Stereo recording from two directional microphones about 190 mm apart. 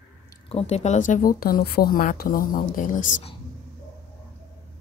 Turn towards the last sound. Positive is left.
turn(degrees=45)  # may be behind; listen again after turning